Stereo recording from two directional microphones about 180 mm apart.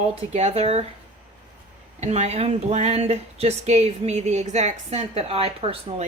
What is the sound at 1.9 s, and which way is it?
A man's voice, 40° right (ahead or behind).